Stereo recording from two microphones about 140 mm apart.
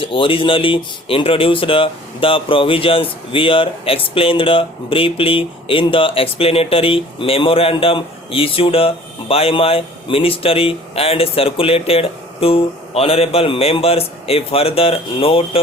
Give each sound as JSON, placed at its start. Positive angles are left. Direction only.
{"t": 0.0, "sound": "speech", "side_deg": 40}